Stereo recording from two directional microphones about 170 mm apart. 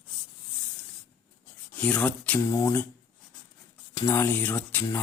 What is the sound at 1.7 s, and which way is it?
Speech, 10° left (ahead or behind).